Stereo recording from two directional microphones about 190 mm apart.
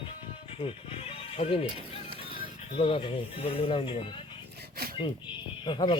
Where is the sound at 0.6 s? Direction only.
30° left (ahead or behind).